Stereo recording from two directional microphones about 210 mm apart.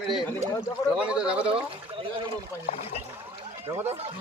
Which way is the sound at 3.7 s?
15° right (ahead or behind).